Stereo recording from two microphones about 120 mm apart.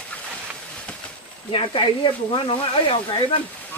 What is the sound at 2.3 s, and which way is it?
Speech, 45° left (ahead or behind).